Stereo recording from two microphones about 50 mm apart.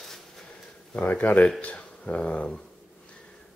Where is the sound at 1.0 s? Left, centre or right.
Left.